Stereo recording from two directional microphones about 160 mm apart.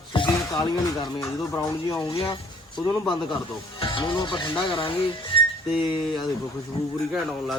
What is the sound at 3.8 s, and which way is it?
Speech, 30° left (ahead or behind).